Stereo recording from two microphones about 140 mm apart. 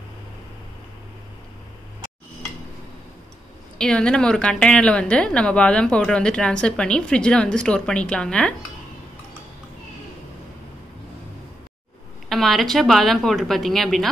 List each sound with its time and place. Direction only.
3.7 s a woman's voice: 5° left (ahead or behind)
12.3 s a woman's voice: centre (ahead or behind)